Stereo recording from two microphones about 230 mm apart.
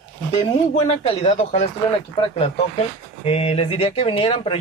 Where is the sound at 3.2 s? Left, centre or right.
Left.